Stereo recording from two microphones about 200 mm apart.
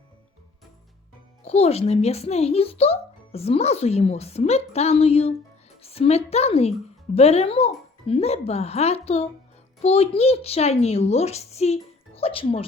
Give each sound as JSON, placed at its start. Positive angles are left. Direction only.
{"t": 1.5, "sound": "a child's voice", "side_deg": 30}